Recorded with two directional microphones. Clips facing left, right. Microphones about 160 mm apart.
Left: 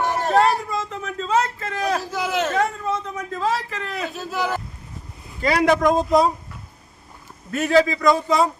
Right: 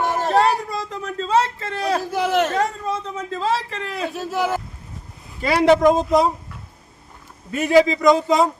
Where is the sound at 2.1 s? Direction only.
55° right (ahead or behind).